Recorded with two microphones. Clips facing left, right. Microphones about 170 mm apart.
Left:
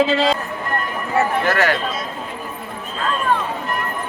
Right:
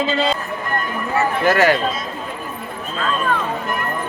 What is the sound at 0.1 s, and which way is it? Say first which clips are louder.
Speech: left 2 dB; 90° left.